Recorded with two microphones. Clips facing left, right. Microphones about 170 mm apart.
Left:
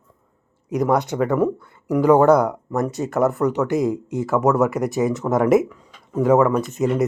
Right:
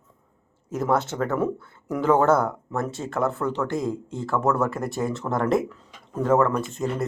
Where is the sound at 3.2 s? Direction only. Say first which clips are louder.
Left 6 dB; 20° left (ahead or behind).